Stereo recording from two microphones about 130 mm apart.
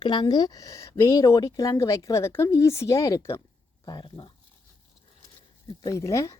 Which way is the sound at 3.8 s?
35° left (ahead or behind).